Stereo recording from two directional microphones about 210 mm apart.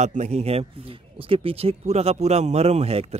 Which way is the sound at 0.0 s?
35° right (ahead or behind).